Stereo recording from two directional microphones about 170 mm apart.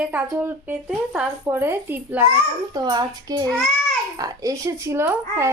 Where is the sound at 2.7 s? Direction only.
25° right (ahead or behind).